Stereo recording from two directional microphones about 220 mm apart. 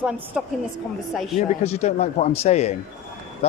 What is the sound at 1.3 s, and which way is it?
Speech, 30° left (ahead or behind).